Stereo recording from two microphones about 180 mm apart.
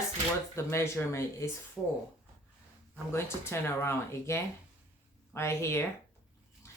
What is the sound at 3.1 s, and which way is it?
Speech, 15° left (ahead or behind).